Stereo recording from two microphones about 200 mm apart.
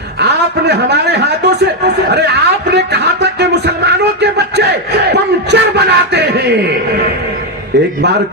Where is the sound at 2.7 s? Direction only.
55° right (ahead or behind).